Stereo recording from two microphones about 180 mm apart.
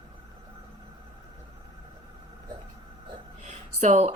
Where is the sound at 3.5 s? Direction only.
40° right (ahead or behind).